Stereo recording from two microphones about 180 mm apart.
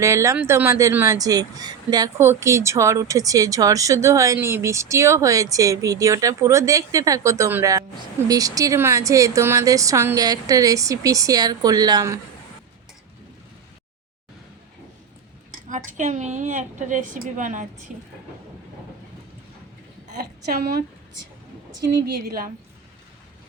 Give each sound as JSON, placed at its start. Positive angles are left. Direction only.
{"t": 0.0, "sound": "speech", "side_deg": -15}
{"t": 15.7, "sound": "a woman's voice", "side_deg": -45}
{"t": 20.5, "sound": "a woman's voice", "side_deg": -60}